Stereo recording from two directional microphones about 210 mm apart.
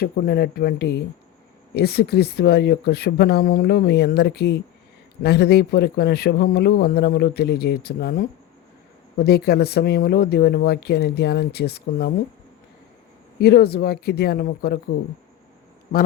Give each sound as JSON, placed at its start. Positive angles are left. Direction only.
{"t": 0.0, "sound": "speech", "side_deg": 45}
{"t": 13.4, "sound": "speech", "side_deg": 50}